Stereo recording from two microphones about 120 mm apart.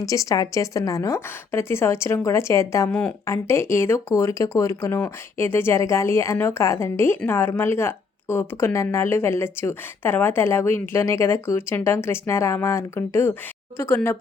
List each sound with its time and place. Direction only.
0.0 s speech: 25° left (ahead or behind)
2.9 s speech: 10° left (ahead or behind)
3.2 s speech: 25° left (ahead or behind)